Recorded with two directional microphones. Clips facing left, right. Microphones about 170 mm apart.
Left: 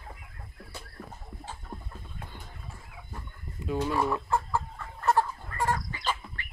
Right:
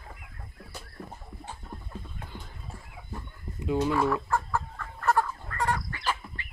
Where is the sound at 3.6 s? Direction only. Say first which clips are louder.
Right 3 dB; 15° right (ahead or behind).